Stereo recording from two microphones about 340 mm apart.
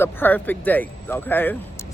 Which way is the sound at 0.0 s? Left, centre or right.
Centre.